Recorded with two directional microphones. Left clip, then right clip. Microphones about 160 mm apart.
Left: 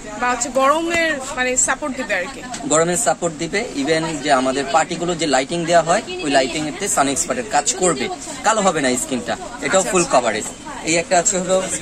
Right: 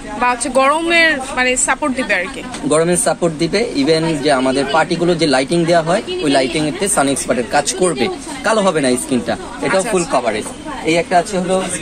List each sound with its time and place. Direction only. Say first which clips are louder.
0.2 s speech: right 4 dB; 5° right (ahead or behind)
2.7 s speech: right 2 dB; 25° right (ahead or behind)
9.8 s speech: even; centre (ahead or behind)
10.9 s a woman's voice: right 3 dB; 15° left (ahead or behind)